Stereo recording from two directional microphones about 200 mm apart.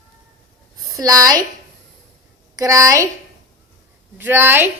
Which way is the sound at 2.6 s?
15° right (ahead or behind).